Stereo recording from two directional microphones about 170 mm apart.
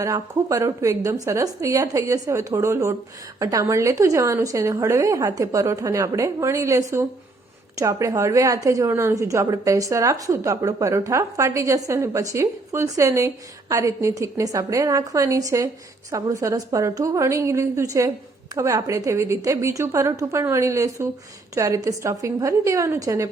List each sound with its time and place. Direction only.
0.0 s a woman's voice: 20° right (ahead or behind)